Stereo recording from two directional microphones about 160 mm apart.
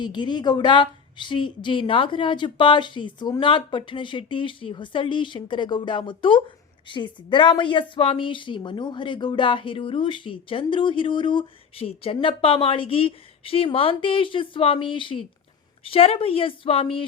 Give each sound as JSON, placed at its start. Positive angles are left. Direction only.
{"t": 0.0, "sound": "a woman's voice", "side_deg": 30}